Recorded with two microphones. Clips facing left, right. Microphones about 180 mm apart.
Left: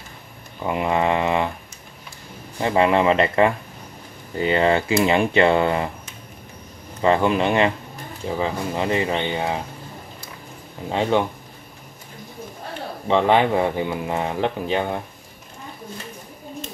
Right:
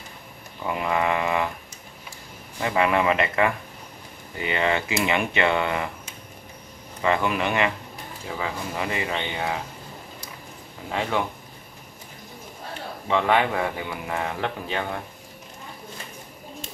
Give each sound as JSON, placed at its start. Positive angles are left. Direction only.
{"t": 0.7, "sound": "speech", "side_deg": 25}
{"t": 2.6, "sound": "speech", "side_deg": 30}
{"t": 7.0, "sound": "speech", "side_deg": 30}
{"t": 10.9, "sound": "speech", "side_deg": 25}
{"t": 13.1, "sound": "speech", "side_deg": 30}